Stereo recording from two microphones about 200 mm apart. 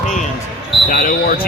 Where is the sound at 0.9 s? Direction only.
45° left (ahead or behind).